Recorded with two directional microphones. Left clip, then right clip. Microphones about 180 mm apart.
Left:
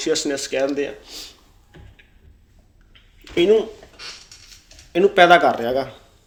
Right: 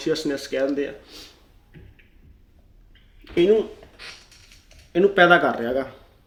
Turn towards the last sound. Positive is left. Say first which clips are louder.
# left 4 dB
turn(degrees=-20)  # may be behind; listen again after turning